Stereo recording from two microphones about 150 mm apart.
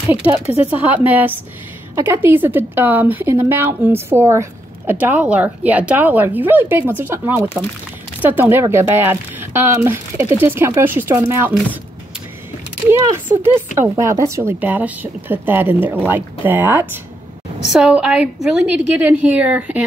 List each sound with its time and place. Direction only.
0.1 s speech: 15° right (ahead or behind)
13.3 s speech: 15° right (ahead or behind)